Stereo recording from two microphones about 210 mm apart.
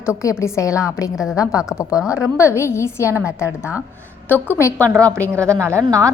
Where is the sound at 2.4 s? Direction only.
15° left (ahead or behind).